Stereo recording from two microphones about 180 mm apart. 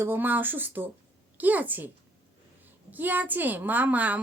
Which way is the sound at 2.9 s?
10° right (ahead or behind).